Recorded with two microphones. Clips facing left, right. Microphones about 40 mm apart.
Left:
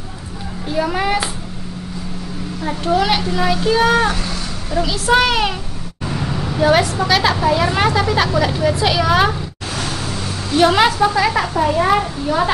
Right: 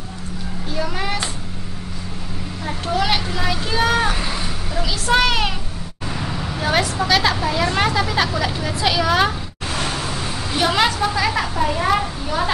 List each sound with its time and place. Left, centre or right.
0.7 s a child's voice: centre
2.6 s a woman's voice: centre
4.1 s a sound: centre
4.6 s a woman's voice: centre
9.7 s a sound: centre
10.6 s a woman's voice: centre